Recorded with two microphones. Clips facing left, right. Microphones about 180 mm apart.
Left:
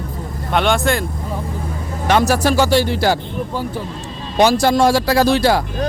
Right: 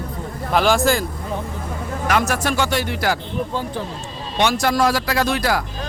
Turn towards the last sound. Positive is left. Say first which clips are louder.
# left 6 dB
turn(degrees=30)  # may be behind; listen again after turning